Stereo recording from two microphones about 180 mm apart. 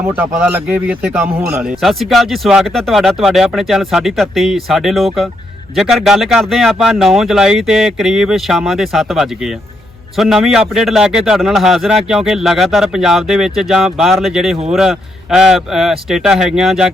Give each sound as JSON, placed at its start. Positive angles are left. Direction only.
{"t": 0.2, "sound": "a man's voice", "side_deg": -10}